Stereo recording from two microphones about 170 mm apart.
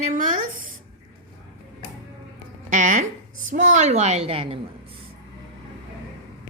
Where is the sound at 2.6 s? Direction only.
50° right (ahead or behind).